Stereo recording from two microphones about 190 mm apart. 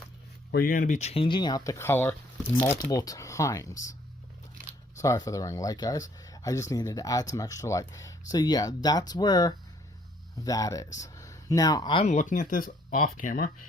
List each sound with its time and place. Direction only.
0.5 s speech: 50° left (ahead or behind); by 3.9 s 15° left (ahead or behind)
4.9 s speech: 15° left (ahead or behind); by 13.7 s 45° left (ahead or behind)